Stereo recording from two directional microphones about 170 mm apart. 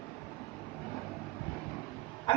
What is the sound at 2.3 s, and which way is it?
Dog, 30° left (ahead or behind).